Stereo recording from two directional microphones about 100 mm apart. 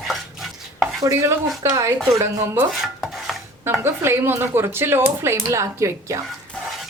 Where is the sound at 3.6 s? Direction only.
25° right (ahead or behind).